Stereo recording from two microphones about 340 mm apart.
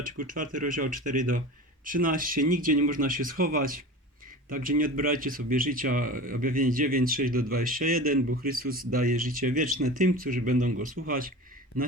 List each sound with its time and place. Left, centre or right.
0.0 s speech: right